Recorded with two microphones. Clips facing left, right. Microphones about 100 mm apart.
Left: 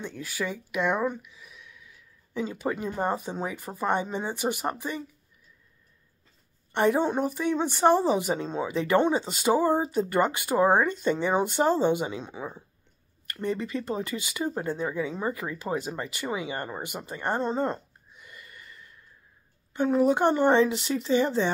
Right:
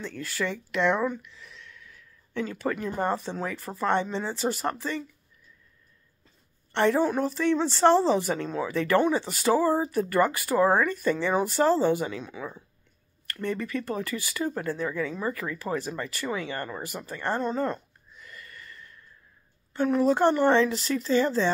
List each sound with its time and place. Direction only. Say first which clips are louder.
0.0 s speech: right 1 dB; 10° left (ahead or behind)
1.2 s a sound: right 2 dB; 10° left (ahead or behind)
2.3 s a woman's voice: even; 15° left (ahead or behind)
6.7 s a woman's voice: even; 15° left (ahead or behind)